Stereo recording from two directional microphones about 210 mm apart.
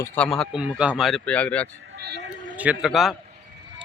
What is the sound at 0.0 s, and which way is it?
Speech, 5° left (ahead or behind).